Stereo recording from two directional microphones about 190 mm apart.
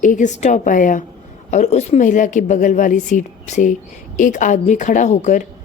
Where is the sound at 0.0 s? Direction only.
40° left (ahead or behind).